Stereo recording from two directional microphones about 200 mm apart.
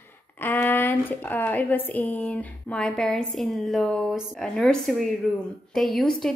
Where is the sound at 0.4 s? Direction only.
10° left (ahead or behind).